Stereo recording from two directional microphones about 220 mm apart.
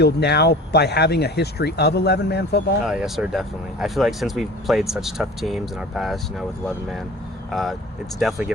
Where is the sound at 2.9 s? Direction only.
Centre (ahead or behind).